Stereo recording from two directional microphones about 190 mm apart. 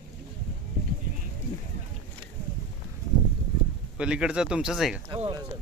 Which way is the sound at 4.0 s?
5° right (ahead or behind).